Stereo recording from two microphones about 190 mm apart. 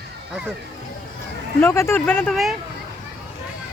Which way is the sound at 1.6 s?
15° left (ahead or behind).